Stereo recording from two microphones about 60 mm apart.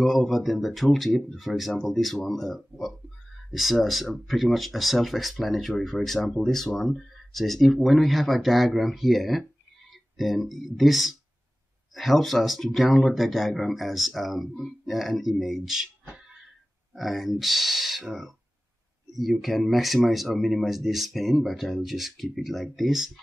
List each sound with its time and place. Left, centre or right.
0.0 s speech: centre
16.9 s speech: centre